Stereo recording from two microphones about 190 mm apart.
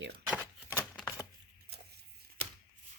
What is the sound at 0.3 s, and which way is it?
Typewriter, 5° right (ahead or behind).